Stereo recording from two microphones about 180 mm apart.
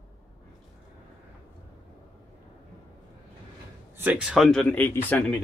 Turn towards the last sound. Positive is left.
turn(degrees=10)  # may be behind; listen again after turning